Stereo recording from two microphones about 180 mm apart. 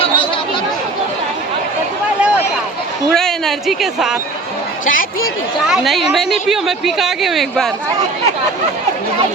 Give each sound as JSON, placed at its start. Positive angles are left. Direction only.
{"t": 3.1, "sound": "a sound", "side_deg": 0}
{"t": 4.9, "sound": "speech", "side_deg": 50}
{"t": 5.6, "sound": "a woman's voice", "side_deg": 0}